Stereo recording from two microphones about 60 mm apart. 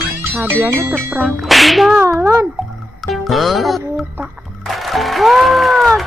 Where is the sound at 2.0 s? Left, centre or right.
Right.